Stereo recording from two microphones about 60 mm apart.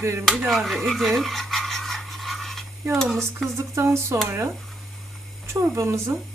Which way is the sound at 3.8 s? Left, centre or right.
Right.